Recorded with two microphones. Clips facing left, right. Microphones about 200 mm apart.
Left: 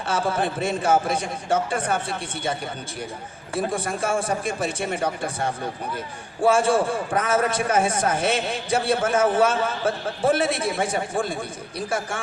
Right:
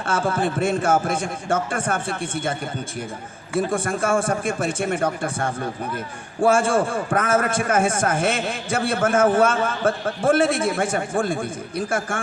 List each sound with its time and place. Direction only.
0.1 s a man's voice: 50° right (ahead or behind)